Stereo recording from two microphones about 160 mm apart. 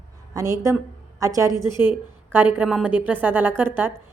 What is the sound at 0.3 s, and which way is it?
A woman's voice, 20° right (ahead or behind).